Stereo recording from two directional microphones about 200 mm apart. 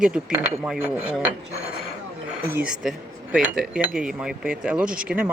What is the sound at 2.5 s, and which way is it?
Speech, 5° right (ahead or behind).